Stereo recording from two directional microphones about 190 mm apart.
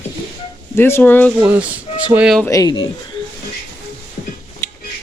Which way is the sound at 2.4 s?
20° left (ahead or behind).